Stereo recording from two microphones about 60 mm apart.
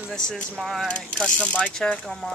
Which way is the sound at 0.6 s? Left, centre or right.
Centre.